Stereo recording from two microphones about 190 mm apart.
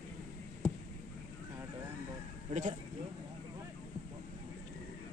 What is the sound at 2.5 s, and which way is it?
Speech, 40° right (ahead or behind).